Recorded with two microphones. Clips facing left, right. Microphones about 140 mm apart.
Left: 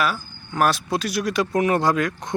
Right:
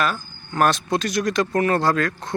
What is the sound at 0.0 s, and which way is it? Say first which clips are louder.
Speech: even; 5° left (ahead or behind).